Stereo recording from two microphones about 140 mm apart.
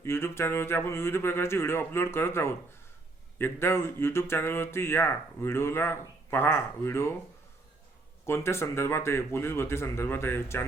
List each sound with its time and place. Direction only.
0.0 s speech: 20° left (ahead or behind)
8.3 s speech: 20° left (ahead or behind)